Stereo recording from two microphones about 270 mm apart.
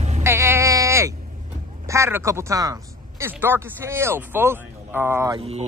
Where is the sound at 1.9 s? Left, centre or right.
Centre.